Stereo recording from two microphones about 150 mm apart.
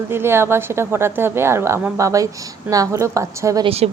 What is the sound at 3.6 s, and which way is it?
Speech, 40° right (ahead or behind).